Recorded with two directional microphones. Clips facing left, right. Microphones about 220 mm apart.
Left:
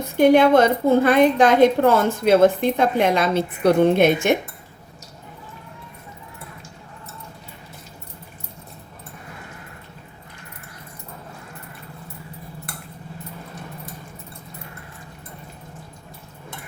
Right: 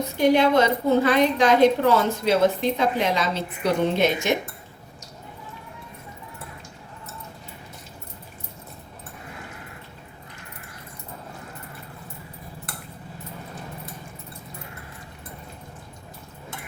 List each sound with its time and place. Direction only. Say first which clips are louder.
0.2 s a woman's voice: left 5 dB; 50° left (ahead or behind)